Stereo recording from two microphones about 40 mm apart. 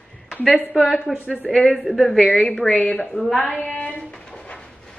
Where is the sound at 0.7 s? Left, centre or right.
Left.